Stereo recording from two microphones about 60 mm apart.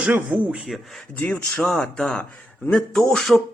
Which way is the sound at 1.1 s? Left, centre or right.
Left.